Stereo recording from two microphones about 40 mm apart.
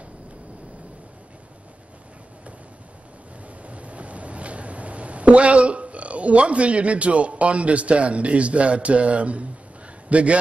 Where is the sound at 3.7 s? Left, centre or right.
Right.